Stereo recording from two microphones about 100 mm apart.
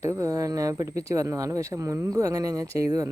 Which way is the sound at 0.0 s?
30° right (ahead or behind).